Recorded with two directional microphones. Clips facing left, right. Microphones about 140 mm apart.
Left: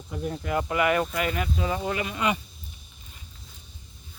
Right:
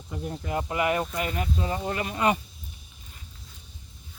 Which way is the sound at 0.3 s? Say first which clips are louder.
Left 3 dB; 75° left (ahead or behind).